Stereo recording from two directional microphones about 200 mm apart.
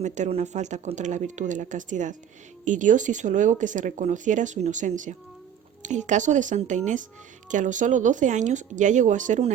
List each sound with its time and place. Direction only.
0.0 s speech: 35° right (ahead or behind)